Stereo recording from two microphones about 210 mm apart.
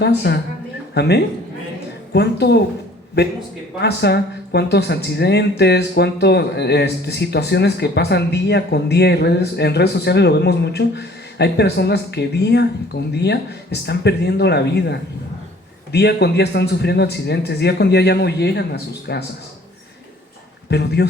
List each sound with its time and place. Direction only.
0.0 s speech: 50° left (ahead or behind)
3.8 s speech: 50° left (ahead or behind)
20.7 s speech: 50° left (ahead or behind)